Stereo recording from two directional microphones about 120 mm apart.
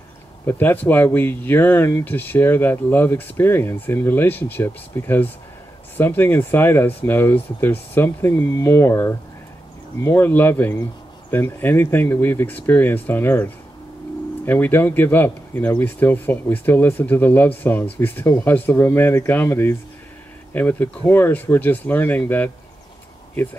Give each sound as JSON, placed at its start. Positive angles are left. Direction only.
{"t": 0.5, "sound": "speech", "side_deg": 15}